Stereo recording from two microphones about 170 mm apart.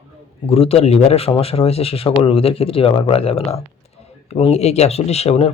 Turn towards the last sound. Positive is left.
turn(degrees=40)  # may be behind; listen again after turning